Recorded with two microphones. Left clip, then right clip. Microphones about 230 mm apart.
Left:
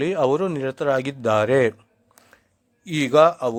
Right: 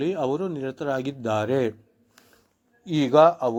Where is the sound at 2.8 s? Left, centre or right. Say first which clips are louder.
Left 1 dB; left.